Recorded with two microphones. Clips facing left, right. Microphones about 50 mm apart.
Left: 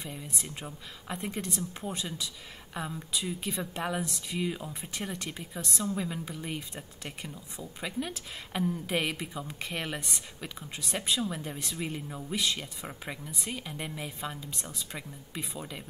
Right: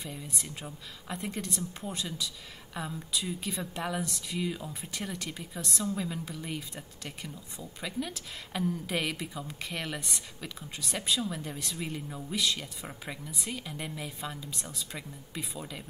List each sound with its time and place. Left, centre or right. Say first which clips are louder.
0.0 s speech: even; centre